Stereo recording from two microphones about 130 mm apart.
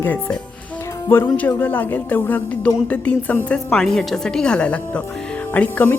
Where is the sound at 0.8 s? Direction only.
20° left (ahead or behind).